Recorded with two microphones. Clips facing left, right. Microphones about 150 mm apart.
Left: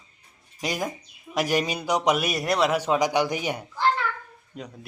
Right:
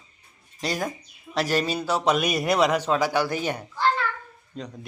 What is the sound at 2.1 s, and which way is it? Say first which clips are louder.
Speech: right 2 dB; centre (ahead or behind).